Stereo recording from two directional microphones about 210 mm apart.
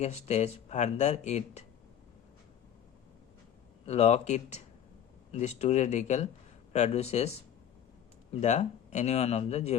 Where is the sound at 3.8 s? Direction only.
30° left (ahead or behind).